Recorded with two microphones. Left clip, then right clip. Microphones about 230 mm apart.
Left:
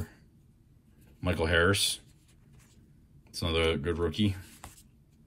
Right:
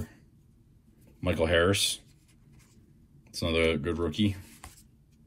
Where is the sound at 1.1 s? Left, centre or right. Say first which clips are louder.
Right 2 dB; centre.